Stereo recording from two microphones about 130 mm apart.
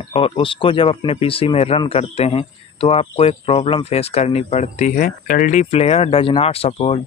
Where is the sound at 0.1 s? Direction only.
40° left (ahead or behind).